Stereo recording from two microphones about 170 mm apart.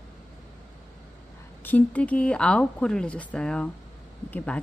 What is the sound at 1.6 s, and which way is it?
Speech, 10° left (ahead or behind).